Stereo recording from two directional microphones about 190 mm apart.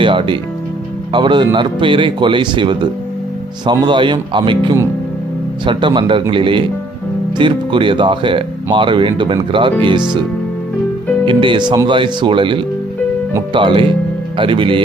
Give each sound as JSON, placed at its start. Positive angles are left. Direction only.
{"t": 0.0, "sound": "speech", "side_deg": -25}
{"t": 11.3, "sound": "speech", "side_deg": -25}